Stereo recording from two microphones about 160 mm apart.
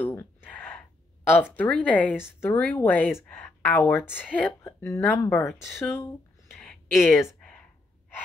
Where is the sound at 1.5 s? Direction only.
10° left (ahead or behind).